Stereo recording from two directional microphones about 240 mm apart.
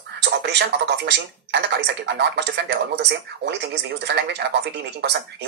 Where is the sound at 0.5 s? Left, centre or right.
Right.